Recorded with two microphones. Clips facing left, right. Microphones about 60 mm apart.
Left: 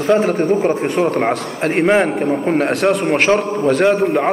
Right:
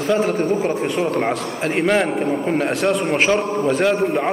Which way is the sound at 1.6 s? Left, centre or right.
Left.